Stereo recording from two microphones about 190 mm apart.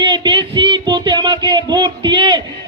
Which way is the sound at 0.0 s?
25° right (ahead or behind).